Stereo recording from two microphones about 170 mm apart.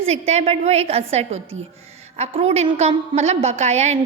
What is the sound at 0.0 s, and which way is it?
A woman's voice, 40° right (ahead or behind).